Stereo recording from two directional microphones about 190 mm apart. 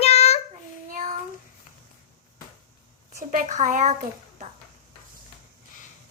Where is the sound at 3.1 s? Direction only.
40° right (ahead or behind).